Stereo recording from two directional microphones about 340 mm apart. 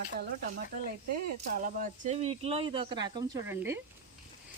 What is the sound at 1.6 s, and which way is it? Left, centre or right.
Speech, right.